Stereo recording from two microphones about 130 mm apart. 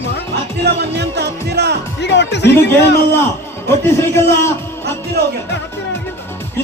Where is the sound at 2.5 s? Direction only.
15° left (ahead or behind).